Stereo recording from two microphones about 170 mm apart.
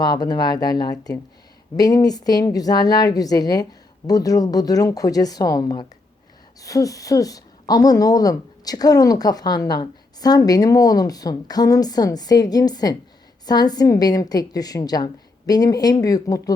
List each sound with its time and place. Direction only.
0.0 s speech: 25° left (ahead or behind)